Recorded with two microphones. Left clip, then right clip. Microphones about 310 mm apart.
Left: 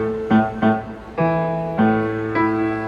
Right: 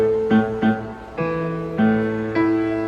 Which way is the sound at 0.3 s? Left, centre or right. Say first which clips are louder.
Left 2 dB; centre.